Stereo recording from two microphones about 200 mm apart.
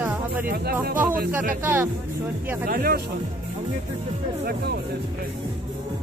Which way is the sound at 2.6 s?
45° right (ahead or behind).